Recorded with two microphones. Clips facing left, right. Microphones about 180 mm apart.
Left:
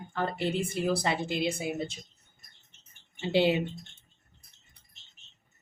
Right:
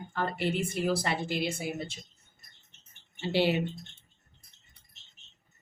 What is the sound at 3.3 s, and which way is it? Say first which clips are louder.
Speech: left 2 dB; 20° left (ahead or behind).